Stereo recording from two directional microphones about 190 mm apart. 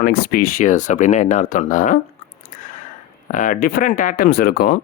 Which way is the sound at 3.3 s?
45° left (ahead or behind).